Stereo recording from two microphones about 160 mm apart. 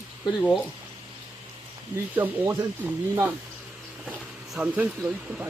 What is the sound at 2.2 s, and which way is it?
Speech, 15° right (ahead or behind).